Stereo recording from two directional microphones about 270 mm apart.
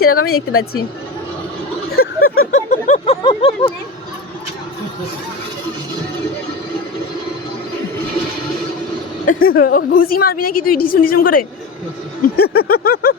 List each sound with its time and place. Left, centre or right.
0.0 s a woman's voice: left
1.9 s a sound: left; by 3.7 s centre
9.2 s a woman's voice: left